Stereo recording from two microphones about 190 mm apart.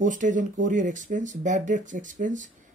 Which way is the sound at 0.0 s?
40° right (ahead or behind).